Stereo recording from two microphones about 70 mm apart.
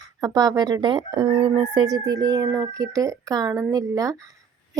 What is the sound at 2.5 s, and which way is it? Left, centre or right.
Speech, right.